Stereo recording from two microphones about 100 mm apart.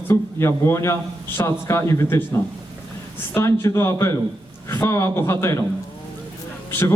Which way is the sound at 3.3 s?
30° left (ahead or behind).